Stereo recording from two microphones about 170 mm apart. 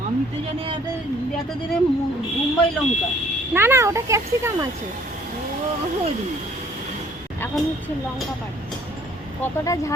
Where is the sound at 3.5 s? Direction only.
15° right (ahead or behind).